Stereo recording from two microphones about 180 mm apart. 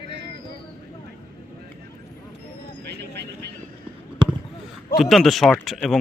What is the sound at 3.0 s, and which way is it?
Vehicle, 65° right (ahead or behind).